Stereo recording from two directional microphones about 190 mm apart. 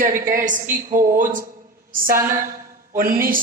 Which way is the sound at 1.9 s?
50° right (ahead or behind).